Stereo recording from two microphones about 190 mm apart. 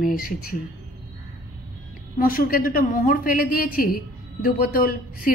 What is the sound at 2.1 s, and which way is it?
A woman's voice, 50° left (ahead or behind).